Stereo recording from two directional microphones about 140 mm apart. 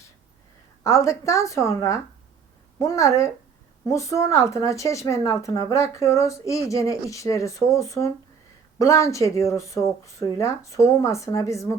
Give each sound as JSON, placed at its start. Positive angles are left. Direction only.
{"t": 0.9, "sound": "a woman's voice", "side_deg": 20}